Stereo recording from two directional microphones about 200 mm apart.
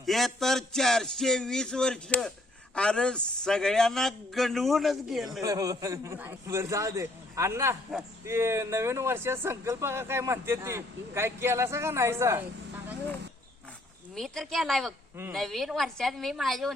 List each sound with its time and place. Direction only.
0.0 s a man's voice: centre (ahead or behind)
5.4 s a man's voice: 15° right (ahead or behind)
14.2 s a man's voice: centre (ahead or behind)